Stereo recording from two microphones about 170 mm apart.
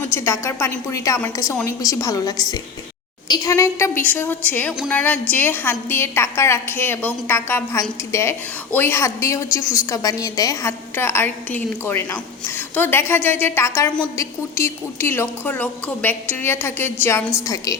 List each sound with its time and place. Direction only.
0.1 s a woman's voice: 15° left (ahead or behind)